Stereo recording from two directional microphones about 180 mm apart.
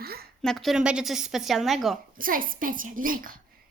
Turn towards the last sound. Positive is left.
turn(degrees=-50)  # may be behind; listen again after turning